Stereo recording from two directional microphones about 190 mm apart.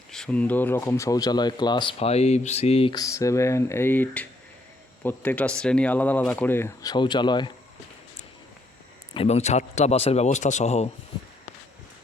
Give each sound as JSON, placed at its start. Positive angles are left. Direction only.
{"t": 0.1, "sound": "speech", "side_deg": 5}
{"t": 2.9, "sound": "speech", "side_deg": 15}
{"t": 9.1, "sound": "speech", "side_deg": 35}